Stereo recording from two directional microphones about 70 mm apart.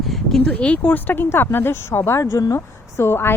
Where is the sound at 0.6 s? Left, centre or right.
Centre.